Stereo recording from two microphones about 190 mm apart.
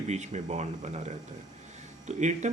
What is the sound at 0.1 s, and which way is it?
Speech, 35° right (ahead or behind).